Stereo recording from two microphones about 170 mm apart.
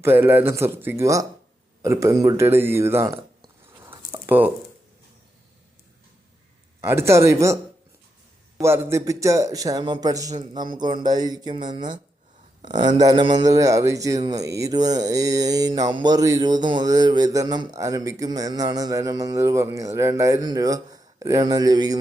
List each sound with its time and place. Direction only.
0.0 s speech: 10° right (ahead or behind)
3.8 s squish: 15° right (ahead or behind)
6.8 s speech: 15° right (ahead or behind)
8.6 s speech: 15° right (ahead or behind)